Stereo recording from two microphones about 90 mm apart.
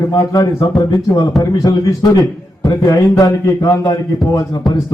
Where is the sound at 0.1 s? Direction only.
40° left (ahead or behind).